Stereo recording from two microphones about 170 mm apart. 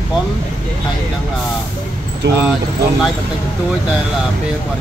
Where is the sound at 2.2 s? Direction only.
90° right.